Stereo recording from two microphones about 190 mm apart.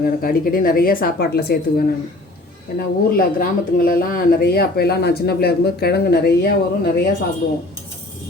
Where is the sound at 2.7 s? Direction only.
50° left (ahead or behind).